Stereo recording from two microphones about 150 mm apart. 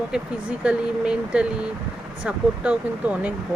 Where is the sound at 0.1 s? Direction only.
5° right (ahead or behind).